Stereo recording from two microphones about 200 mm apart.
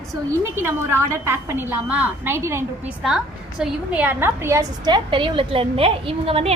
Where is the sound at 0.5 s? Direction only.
10° right (ahead or behind).